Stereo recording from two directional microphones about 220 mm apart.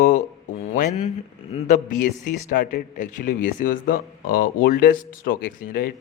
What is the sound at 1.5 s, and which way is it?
A man's voice, 35° left (ahead or behind).